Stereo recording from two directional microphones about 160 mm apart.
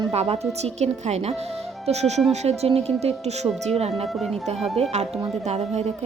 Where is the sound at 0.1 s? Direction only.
40° right (ahead or behind).